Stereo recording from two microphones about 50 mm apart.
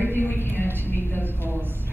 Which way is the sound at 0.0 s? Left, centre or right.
Left.